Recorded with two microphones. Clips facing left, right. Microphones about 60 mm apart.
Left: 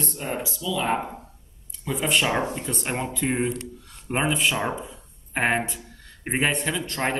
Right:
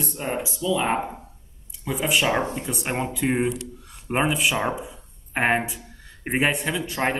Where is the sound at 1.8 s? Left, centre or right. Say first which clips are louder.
Right 1 dB; centre.